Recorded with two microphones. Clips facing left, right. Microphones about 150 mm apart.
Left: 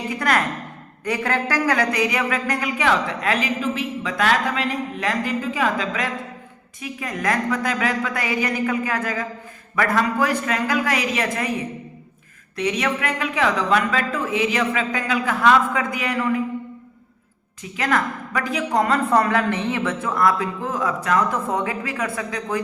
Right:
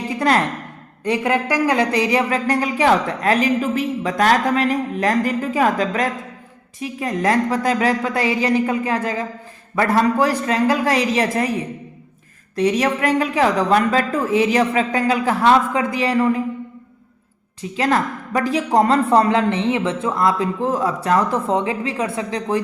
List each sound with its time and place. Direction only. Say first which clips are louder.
0.1 s sigh: right 4 dB; 30° right (ahead or behind)
1.0 s speech: right 4 dB; 20° right (ahead or behind)
12.5 s speech: right 5 dB; 35° right (ahead or behind)
17.6 s a woman's voice: right 3 dB; 30° right (ahead or behind)